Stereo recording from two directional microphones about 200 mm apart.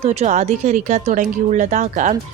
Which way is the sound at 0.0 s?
30° right (ahead or behind).